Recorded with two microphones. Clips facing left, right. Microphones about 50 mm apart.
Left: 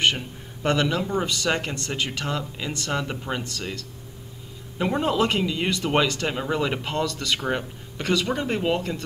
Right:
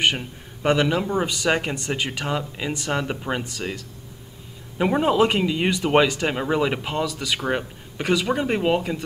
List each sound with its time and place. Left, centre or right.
0.0 s speech: centre